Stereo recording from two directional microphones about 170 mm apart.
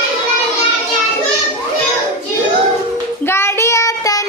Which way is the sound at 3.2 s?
15° left (ahead or behind).